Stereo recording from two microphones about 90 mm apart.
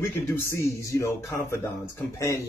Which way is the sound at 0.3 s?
30° left (ahead or behind).